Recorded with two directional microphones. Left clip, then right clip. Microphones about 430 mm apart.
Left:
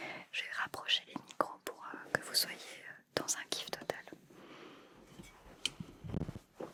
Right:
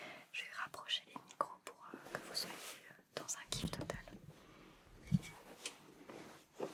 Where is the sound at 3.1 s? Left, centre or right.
Left.